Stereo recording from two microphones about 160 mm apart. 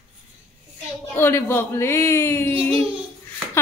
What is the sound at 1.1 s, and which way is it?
A man's voice, 15° left (ahead or behind).